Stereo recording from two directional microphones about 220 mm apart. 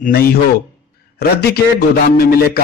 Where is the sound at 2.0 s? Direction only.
40° left (ahead or behind).